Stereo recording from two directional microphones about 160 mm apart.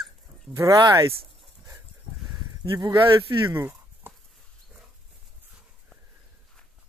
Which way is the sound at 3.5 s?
15° right (ahead or behind).